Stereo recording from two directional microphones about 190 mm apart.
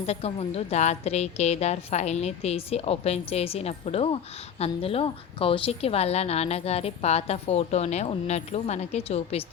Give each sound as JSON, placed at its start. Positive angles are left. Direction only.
{"t": 0.0, "sound": "a woman's voice", "side_deg": 35}